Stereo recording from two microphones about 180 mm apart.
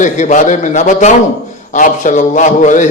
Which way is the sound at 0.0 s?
45° left (ahead or behind).